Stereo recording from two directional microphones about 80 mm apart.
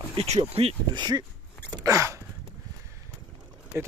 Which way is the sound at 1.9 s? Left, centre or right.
Right.